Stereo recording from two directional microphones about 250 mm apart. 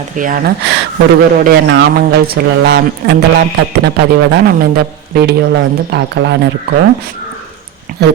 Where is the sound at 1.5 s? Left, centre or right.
Right.